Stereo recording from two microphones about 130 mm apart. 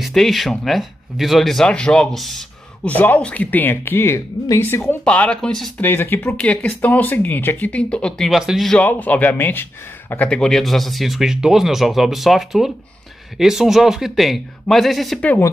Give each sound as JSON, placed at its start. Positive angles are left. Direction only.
{"t": 0.0, "sound": "speech", "side_deg": 0}
{"t": 5.8, "sound": "speech", "side_deg": 15}
{"t": 8.8, "sound": "speech", "side_deg": 15}